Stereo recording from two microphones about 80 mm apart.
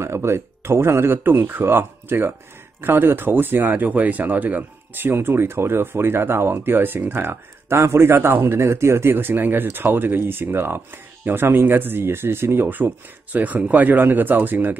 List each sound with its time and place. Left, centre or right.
0.0 s speech: right